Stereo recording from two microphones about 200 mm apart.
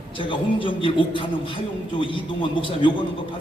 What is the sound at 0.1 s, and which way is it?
A man's voice, 25° left (ahead or behind).